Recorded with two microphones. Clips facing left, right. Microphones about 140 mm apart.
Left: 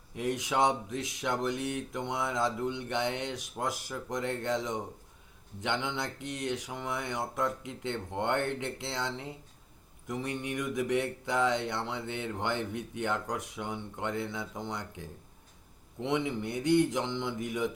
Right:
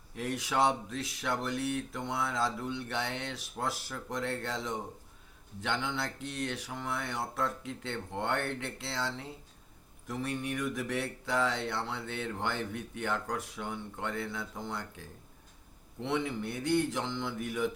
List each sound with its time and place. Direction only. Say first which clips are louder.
0.2 s speech: left 1 dB; 20° left (ahead or behind)